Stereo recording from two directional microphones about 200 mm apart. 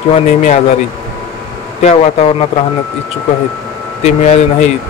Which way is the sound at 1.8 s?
30° left (ahead or behind).